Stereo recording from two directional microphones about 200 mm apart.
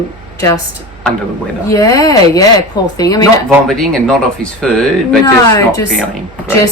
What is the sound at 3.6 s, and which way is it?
Speech, 5° left (ahead or behind).